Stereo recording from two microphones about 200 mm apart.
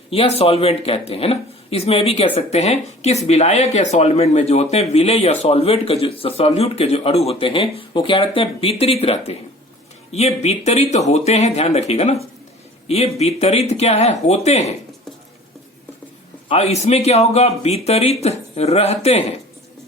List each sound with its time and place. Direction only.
0.1 s speech: 30° left (ahead or behind)
16.5 s speech: 30° left (ahead or behind)